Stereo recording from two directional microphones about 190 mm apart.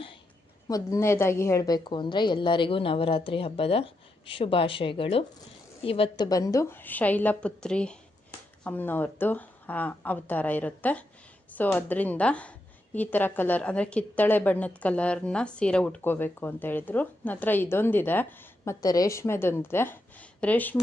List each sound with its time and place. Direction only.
0.7 s a woman's voice: 15° left (ahead or behind)